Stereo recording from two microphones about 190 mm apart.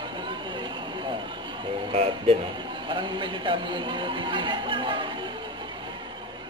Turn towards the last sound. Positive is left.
turn(degrees=-25)  # may be behind; listen again after turning